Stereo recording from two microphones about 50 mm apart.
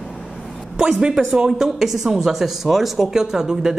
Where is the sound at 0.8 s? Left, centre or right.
Centre.